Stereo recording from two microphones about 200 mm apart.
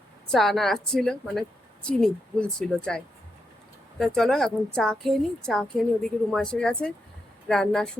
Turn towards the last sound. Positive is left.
turn(degrees=0)  # may be behind; listen again after turning